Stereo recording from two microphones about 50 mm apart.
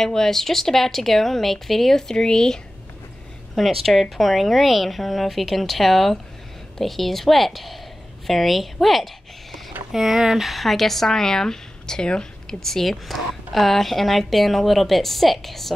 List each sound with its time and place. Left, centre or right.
0.0 s speech: centre
3.5 s speech: centre